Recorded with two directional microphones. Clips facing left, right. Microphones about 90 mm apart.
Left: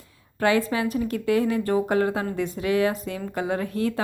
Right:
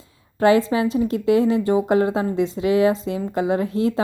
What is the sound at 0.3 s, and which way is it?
Speech, 25° right (ahead or behind).